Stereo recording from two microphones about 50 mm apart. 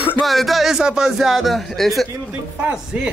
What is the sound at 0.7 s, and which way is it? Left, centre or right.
A man's voice, centre.